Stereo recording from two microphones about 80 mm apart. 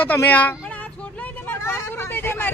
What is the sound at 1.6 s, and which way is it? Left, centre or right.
Vehicle, left.